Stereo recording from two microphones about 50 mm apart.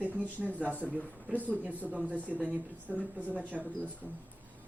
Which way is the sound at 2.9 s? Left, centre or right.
Right.